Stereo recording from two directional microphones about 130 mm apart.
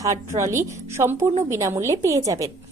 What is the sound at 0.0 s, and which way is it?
Speech, 25° right (ahead or behind).